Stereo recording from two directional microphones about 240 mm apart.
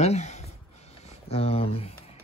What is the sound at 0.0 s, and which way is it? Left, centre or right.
Speech, left.